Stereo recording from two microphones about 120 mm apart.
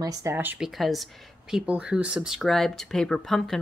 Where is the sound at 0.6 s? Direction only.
Centre (ahead or behind).